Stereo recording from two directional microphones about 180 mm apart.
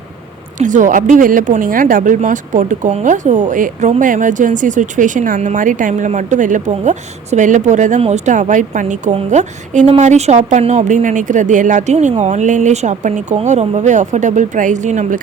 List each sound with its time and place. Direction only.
0.6 s speech: 45° right (ahead or behind)